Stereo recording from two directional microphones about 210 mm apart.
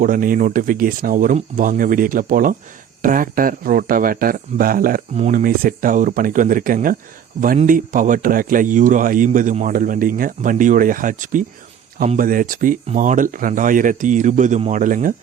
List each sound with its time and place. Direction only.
0.0 s speech: 40° right (ahead or behind)